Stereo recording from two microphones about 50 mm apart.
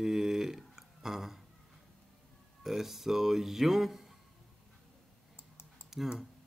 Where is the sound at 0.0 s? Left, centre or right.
Centre.